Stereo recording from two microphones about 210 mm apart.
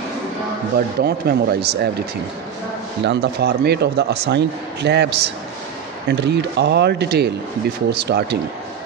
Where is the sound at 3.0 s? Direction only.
50° right (ahead or behind).